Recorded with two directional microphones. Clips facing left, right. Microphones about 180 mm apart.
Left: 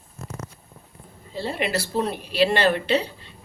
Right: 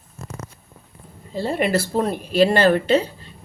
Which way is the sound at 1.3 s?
45° right (ahead or behind).